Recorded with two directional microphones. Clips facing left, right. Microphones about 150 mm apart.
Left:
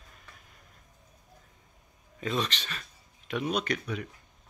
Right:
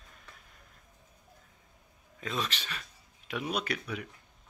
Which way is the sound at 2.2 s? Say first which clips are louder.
Left 4 dB; centre (ahead or behind).